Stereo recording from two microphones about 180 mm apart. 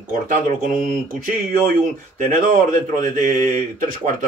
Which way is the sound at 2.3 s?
45° right (ahead or behind).